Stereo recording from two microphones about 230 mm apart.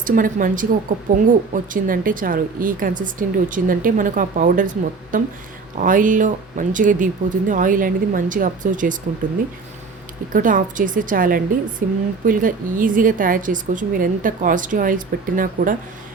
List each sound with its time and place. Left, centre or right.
0.0 s speech: right
10.3 s speech: right